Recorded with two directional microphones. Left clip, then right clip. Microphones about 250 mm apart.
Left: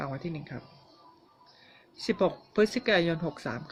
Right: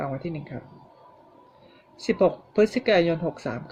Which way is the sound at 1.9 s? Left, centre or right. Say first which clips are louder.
Right 6 dB; left.